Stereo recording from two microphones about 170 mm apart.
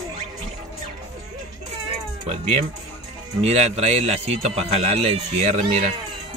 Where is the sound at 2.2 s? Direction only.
35° right (ahead or behind).